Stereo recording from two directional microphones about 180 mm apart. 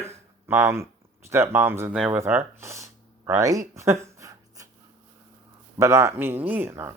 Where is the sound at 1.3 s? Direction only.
15° right (ahead or behind).